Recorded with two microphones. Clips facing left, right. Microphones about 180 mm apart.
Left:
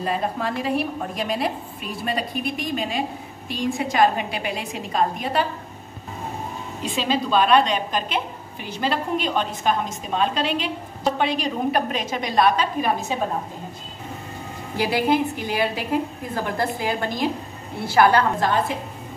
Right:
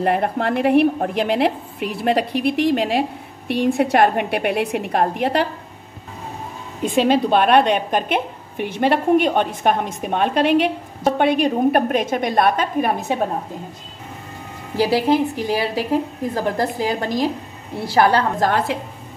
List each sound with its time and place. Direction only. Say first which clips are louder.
0.0 s a woman's voice: right 6 dB; 65° right (ahead or behind)
6.8 s a woman's voice: right 8 dB; 55° right (ahead or behind)
14.8 s a woman's voice: right 4 dB; 35° right (ahead or behind)